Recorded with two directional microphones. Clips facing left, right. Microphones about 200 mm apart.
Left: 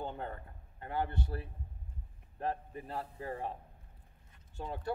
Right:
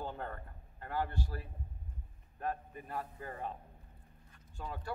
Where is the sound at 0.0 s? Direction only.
20° left (ahead or behind).